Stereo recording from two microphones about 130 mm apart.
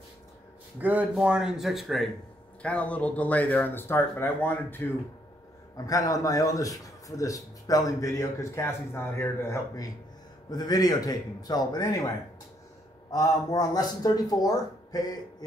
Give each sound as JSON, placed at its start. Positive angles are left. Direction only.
{"t": 0.7, "sound": "speech", "side_deg": -10}
{"t": 2.6, "sound": "speech", "side_deg": 10}
{"t": 5.8, "sound": "a man's voice", "side_deg": 25}
{"t": 13.1, "sound": "a man's voice", "side_deg": 25}